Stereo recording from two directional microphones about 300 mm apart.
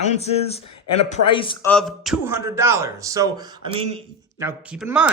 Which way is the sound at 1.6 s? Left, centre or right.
Centre.